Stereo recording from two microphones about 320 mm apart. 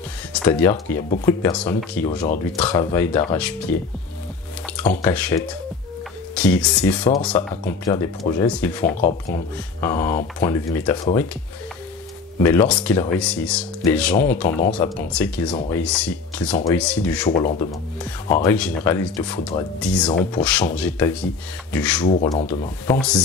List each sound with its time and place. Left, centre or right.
0.3 s speech: centre
4.7 s speech: centre
9.8 s speech: centre
12.4 s speech: centre
17.3 s speech: left
18.3 s speech: centre
22.1 s speech: centre
22.9 s speech: centre